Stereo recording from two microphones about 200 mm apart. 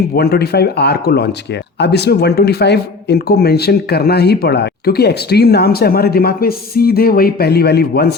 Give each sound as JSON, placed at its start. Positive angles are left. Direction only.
{"t": 0.1, "sound": "speech", "side_deg": 55}